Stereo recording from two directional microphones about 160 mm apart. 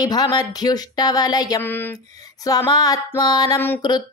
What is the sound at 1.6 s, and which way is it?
Speech, 15° left (ahead or behind).